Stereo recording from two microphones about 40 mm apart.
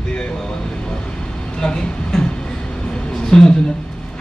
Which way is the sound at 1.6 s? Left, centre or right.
Centre.